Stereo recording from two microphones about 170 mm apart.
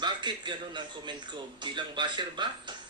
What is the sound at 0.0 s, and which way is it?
A man's voice, 25° right (ahead or behind).